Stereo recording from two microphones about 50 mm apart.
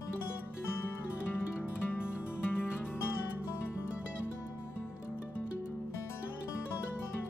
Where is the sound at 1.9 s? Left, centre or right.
Left.